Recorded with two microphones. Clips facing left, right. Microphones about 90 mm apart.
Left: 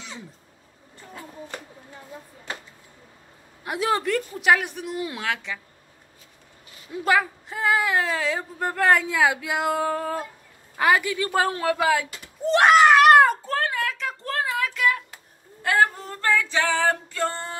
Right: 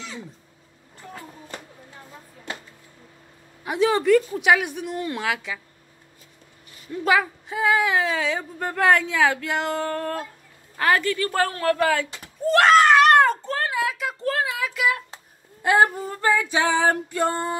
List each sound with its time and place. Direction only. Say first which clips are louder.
3.6 s speech: right 4 dB; centre (ahead or behind)
6.9 s a woman's voice: right 1 dB; centre (ahead or behind)
15.6 s female singing: right 3 dB; 15° right (ahead or behind)